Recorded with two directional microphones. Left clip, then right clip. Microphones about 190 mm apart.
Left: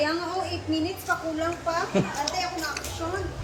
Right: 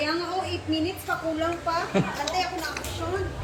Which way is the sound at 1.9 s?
20° left (ahead or behind).